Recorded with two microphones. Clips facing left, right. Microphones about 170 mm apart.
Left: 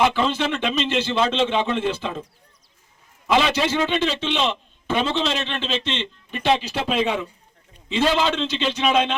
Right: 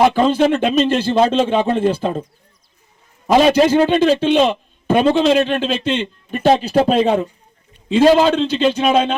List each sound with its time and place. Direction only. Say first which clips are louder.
0.0 s a man's voice: right 7 dB; 45° right (ahead or behind)
3.2 s a man's voice: right 8 dB; 40° right (ahead or behind)
6.3 s a man's voice: right 8 dB; 40° right (ahead or behind)